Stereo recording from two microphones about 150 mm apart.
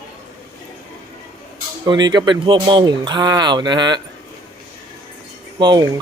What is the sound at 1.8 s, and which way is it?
Speech, 25° right (ahead or behind).